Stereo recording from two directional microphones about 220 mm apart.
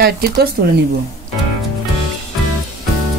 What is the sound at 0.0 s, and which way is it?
Speech, 45° right (ahead or behind).